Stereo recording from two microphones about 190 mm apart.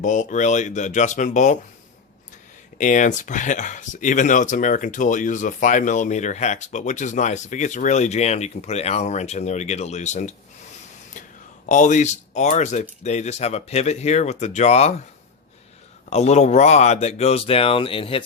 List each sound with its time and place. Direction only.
0.0 s speech: 40° left (ahead or behind)
2.7 s speech: 40° left (ahead or behind)
11.7 s speech: 40° left (ahead or behind)
16.0 s speech: 35° left (ahead or behind)